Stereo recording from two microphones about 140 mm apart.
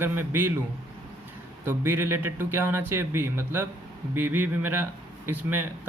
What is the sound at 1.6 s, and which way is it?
Speech, 15° right (ahead or behind).